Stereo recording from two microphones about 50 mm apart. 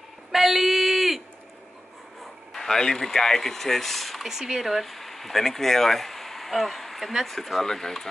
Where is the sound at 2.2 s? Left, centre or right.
Centre.